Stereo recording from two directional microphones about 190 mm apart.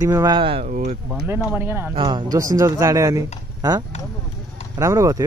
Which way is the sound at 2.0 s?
25° right (ahead or behind).